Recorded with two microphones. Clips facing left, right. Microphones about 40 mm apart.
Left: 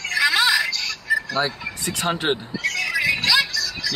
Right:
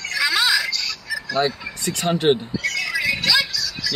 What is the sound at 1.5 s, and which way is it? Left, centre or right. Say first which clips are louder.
Speech: right 1 dB; centre.